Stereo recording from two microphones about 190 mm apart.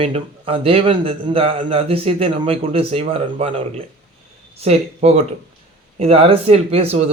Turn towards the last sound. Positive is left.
turn(degrees=-35)  # may be behind; listen again after turning